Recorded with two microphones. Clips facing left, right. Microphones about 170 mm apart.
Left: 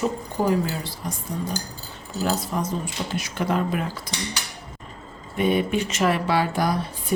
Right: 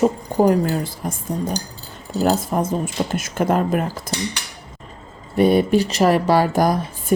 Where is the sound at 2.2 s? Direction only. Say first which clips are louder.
Right 6 dB; 50° right (ahead or behind).